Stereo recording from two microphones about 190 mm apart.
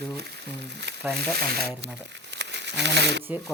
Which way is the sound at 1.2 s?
55° right (ahead or behind).